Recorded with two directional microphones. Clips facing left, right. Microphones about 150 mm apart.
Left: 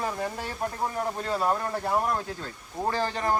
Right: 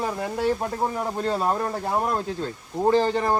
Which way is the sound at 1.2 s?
25° right (ahead or behind).